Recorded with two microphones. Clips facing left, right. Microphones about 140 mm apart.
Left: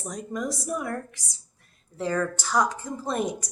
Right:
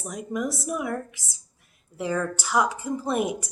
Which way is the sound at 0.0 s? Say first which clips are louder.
Right 2 dB; 5° right (ahead or behind).